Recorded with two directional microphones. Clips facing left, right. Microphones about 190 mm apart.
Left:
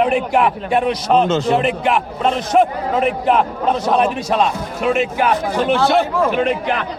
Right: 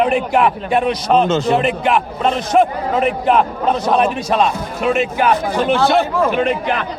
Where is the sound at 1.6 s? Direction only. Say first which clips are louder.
Right 1 dB; 5° left (ahead or behind).